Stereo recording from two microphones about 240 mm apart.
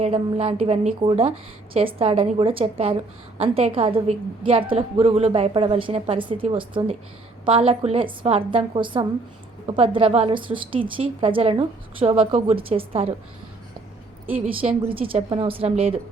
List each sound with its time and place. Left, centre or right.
0.0 s a woman's voice: right
14.8 s a woman's voice: right